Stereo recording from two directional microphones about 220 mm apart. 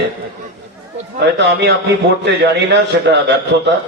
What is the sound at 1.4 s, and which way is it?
A man's voice, 50° right (ahead or behind).